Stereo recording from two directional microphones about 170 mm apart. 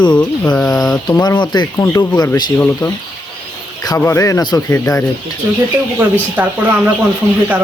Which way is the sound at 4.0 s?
15° left (ahead or behind).